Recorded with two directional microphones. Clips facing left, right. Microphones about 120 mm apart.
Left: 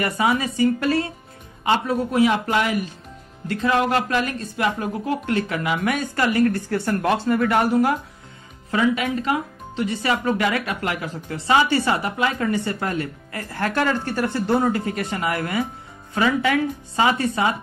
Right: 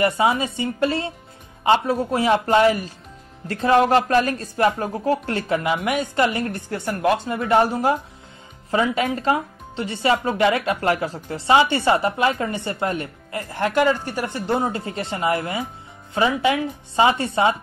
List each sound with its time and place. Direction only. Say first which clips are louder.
0.0 s speech: right 2 dB; 25° right (ahead or behind)
7.2 s speech: even; 25° right (ahead or behind)